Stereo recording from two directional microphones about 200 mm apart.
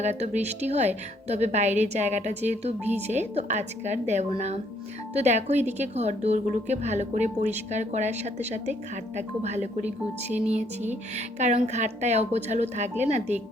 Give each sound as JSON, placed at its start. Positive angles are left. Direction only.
{"t": 0.0, "sound": "a woman's voice", "side_deg": -35}